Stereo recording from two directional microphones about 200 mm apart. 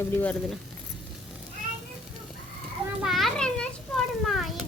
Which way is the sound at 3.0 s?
Centre (ahead or behind).